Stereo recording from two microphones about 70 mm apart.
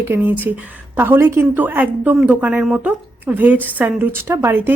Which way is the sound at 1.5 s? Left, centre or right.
Right.